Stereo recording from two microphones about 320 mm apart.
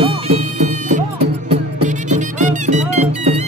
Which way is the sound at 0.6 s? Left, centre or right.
Right.